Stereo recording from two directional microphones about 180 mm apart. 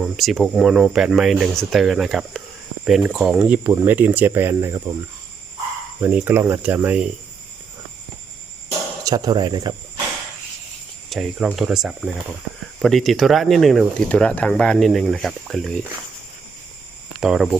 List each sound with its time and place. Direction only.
0.0 s speech: centre (ahead or behind)
6.0 s speech: 10° right (ahead or behind)
9.0 s speech: 20° right (ahead or behind)
11.1 s speech: 5° right (ahead or behind)
17.2 s speech: centre (ahead or behind)